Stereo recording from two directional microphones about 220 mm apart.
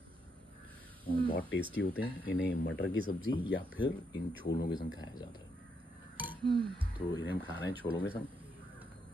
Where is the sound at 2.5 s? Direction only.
40° left (ahead or behind).